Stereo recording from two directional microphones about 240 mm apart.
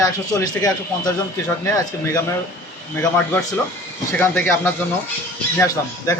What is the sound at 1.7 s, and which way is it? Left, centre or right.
Speech, centre.